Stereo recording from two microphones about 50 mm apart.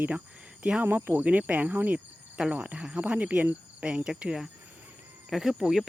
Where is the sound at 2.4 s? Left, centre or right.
Centre.